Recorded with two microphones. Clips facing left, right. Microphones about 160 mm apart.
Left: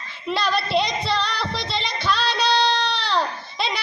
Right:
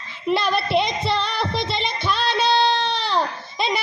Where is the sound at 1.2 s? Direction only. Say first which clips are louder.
Right 3 dB; 55° right (ahead or behind).